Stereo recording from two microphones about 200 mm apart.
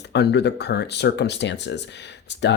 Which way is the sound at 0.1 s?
55° left (ahead or behind).